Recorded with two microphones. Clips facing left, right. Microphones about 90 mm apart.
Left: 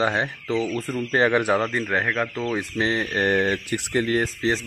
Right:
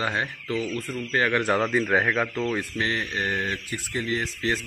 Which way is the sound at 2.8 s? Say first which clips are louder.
Left 4 dB; 30° left (ahead or behind).